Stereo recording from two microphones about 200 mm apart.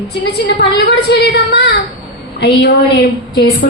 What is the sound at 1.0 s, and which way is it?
A woman's voice, 55° left (ahead or behind).